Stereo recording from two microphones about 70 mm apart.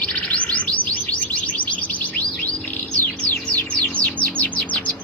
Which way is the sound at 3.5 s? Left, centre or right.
Centre.